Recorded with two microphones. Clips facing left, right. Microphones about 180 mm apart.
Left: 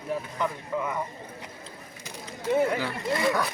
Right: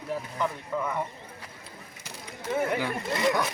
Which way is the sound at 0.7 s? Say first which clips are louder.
Left 1 dB; 15° left (ahead or behind).